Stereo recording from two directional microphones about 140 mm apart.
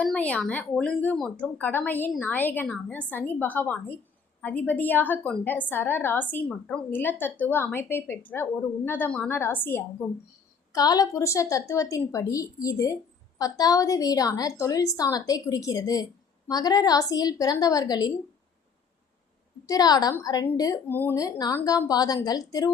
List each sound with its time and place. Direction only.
0.0 s a woman's voice: 10° left (ahead or behind)
10.0 s speech: centre (ahead or behind)
10.7 s a woman's voice: 25° left (ahead or behind)
19.6 s a woman's voice: 25° left (ahead or behind)
20.9 s a woman's voice: 15° left (ahead or behind)
21.2 s a woman's voice: 25° left (ahead or behind)